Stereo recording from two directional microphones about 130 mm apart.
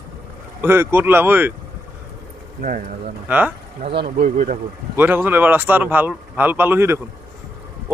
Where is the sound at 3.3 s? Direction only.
10° right (ahead or behind).